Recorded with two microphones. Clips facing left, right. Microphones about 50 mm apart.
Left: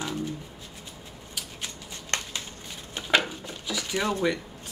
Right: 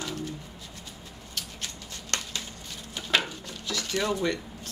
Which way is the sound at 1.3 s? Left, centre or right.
Centre.